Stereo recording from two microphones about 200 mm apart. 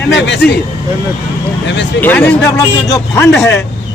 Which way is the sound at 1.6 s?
60° left (ahead or behind).